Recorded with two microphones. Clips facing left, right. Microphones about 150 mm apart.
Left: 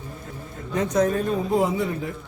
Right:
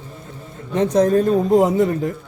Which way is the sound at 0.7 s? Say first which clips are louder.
Right 6 dB; 30° right (ahead or behind).